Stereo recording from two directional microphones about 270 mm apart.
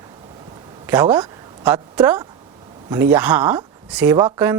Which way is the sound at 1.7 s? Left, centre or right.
Centre.